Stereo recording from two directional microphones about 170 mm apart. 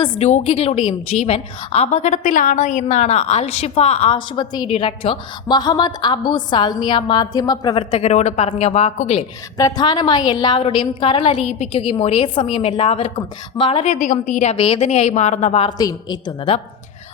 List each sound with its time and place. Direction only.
0.0 s a woman's voice: 30° left (ahead or behind)
9.6 s a woman's voice: 25° left (ahead or behind)
11.3 s a woman's voice: 40° left (ahead or behind)
13.9 s a woman's voice: 45° left (ahead or behind)
15.8 s a woman's voice: 25° left (ahead or behind)